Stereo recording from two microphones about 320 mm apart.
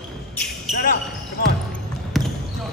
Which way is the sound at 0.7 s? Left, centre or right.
Left.